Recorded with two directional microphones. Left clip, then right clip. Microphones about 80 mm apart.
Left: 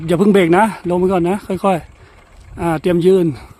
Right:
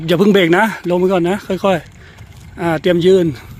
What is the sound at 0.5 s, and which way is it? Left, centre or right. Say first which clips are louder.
Speech: even; left.